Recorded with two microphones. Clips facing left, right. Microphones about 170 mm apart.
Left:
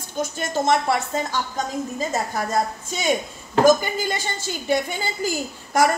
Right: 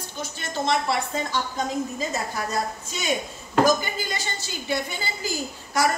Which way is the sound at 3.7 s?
50° left (ahead or behind).